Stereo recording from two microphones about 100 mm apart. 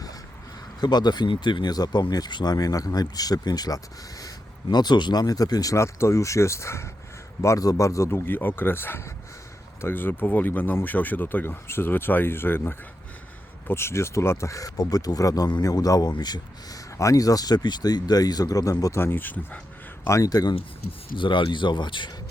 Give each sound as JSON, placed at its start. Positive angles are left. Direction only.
{"t": 0.8, "sound": "speech", "side_deg": 45}
{"t": 20.1, "sound": "speech", "side_deg": 35}
{"t": 21.2, "sound": "speech", "side_deg": 55}